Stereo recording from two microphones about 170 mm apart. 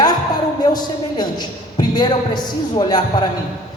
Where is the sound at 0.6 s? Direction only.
25° left (ahead or behind).